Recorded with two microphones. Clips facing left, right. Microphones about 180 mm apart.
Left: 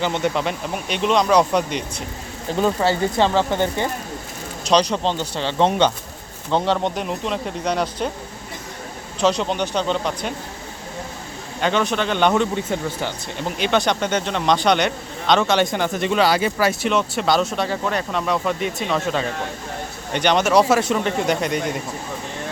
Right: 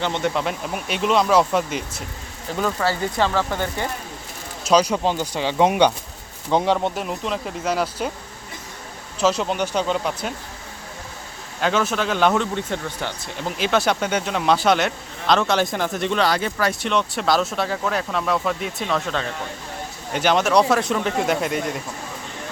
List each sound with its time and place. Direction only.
0.0 s a man's voice: centre (ahead or behind)
2.6 s speech: 25° left (ahead or behind)
4.6 s a man's voice: 5° right (ahead or behind)
9.2 s a man's voice: 5° right (ahead or behind)
11.6 s a man's voice: 5° right (ahead or behind)